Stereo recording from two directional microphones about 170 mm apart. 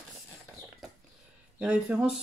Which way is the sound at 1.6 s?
5° right (ahead or behind).